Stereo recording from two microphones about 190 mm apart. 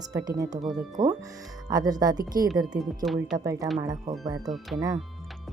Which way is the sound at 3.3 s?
20° right (ahead or behind).